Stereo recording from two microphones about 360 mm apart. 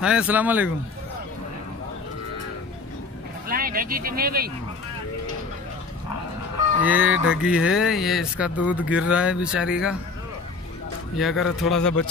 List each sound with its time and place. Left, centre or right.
0.0 s speech: centre
3.4 s speech: right
6.8 s speech: centre
11.1 s speech: centre